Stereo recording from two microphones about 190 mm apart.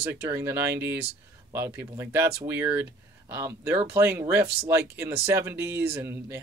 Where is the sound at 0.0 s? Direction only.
10° right (ahead or behind).